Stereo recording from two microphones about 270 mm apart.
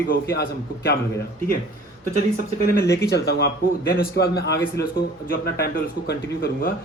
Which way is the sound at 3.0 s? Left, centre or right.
Left.